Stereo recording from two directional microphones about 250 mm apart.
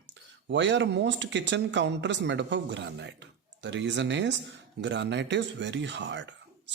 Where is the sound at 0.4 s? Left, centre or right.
Right.